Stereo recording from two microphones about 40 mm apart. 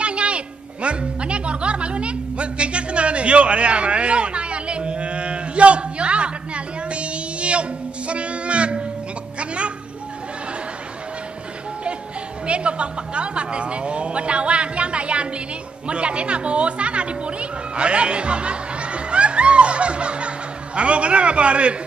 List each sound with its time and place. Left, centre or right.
0.0 s music: right
8.1 s a sound: right
12.4 s a woman's voice: right